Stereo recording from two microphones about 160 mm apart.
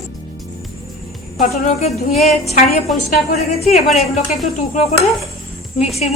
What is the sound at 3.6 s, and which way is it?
Speech, 40° left (ahead or behind).